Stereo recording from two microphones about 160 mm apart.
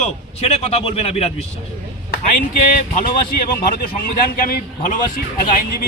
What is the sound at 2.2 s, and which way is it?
A man's voice, 55° left (ahead or behind).